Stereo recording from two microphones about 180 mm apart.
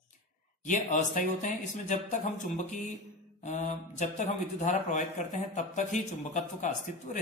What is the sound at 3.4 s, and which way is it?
A man's voice, 40° left (ahead or behind).